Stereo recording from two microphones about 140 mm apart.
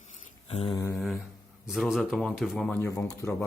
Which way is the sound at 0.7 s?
20° left (ahead or behind).